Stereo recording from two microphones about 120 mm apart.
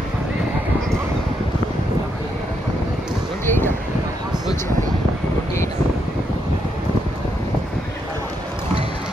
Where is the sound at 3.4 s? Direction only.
20° left (ahead or behind).